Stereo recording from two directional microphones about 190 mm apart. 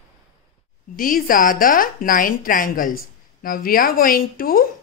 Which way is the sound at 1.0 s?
45° left (ahead or behind).